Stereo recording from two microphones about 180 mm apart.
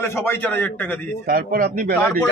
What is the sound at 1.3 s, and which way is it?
Speech, 55° right (ahead or behind).